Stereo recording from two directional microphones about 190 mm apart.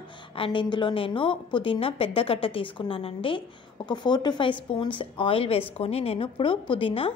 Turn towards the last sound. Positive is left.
turn(degrees=30)  # may be behind; listen again after turning